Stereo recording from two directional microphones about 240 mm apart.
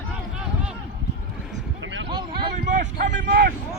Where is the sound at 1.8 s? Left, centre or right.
Right.